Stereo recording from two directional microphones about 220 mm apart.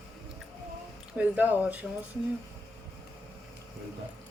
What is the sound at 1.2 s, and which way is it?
Speech, 5° right (ahead or behind).